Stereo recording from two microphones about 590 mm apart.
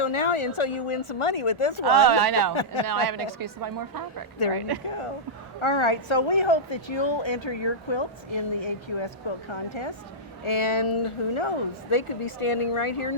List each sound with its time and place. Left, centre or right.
0.0 s speech: left
2.0 s a woman's voice: right
5.5 s a woman's voice: left